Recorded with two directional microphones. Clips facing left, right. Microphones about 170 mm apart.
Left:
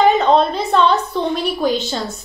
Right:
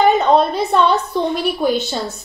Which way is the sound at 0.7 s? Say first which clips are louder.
Even; 10° right (ahead or behind).